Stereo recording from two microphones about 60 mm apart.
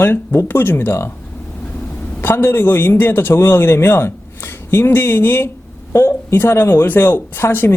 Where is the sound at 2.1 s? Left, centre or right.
Left.